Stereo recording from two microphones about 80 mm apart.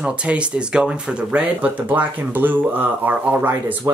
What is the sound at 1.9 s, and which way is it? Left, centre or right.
Speech, right.